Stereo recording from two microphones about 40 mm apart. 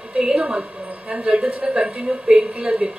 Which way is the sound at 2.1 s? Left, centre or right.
Right.